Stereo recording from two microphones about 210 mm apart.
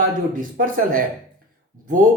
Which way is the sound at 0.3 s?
40° right (ahead or behind).